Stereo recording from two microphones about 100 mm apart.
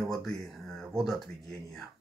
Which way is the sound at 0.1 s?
5° left (ahead or behind).